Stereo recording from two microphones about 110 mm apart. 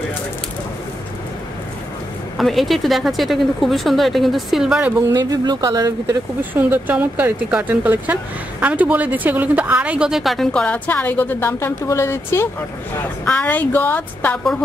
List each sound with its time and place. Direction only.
2.3 s speech: centre (ahead or behind)
5.1 s speech: 35° right (ahead or behind)
6.5 s speech: 15° right (ahead or behind); by 14.4 s 15° left (ahead or behind)